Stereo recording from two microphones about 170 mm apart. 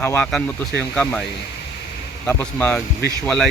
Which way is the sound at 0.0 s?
15° left (ahead or behind).